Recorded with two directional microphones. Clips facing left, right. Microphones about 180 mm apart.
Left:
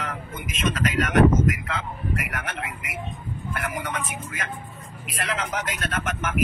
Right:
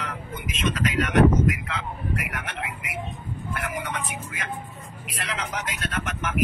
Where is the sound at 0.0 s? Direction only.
45° left (ahead or behind).